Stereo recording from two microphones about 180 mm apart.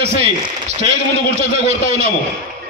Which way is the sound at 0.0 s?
35° right (ahead or behind).